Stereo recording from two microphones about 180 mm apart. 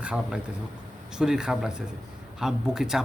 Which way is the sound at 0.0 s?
5° right (ahead or behind).